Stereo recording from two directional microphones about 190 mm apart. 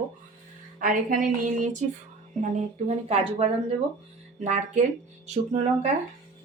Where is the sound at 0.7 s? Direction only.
45° right (ahead or behind).